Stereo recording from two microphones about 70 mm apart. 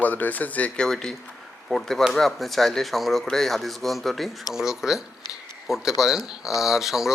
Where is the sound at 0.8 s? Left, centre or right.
Centre.